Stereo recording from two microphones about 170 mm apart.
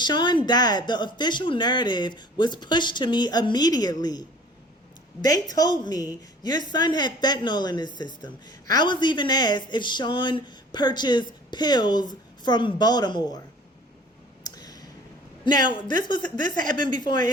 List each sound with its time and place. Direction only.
0.0 s a woman's voice: 25° left (ahead or behind)
14.4 s clicking: 25° left (ahead or behind)
15.4 s a woman's voice: 25° left (ahead or behind)